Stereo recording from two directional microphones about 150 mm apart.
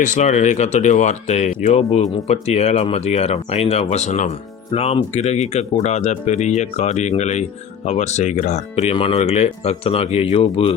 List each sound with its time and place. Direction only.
0.0 s speech: 55° left (ahead or behind); by 10.8 s 40° left (ahead or behind)